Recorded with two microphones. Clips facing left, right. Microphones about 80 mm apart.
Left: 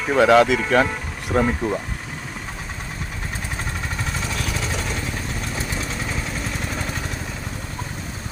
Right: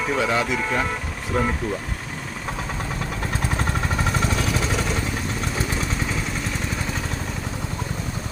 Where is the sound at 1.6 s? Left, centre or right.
Left.